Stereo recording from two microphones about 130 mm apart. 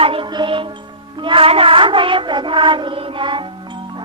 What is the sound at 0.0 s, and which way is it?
Music, 45° right (ahead or behind).